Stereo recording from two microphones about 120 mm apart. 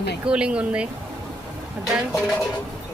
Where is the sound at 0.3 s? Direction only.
10° right (ahead or behind).